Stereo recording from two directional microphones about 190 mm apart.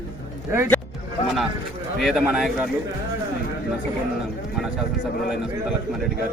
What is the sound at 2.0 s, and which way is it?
Speech, centre (ahead or behind).